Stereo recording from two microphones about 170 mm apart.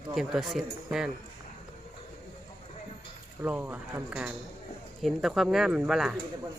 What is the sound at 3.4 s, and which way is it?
Speech, 10° right (ahead or behind).